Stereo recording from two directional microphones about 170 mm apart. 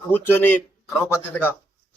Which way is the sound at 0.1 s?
10° left (ahead or behind).